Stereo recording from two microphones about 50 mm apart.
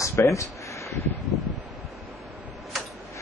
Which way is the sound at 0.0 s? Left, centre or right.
Left.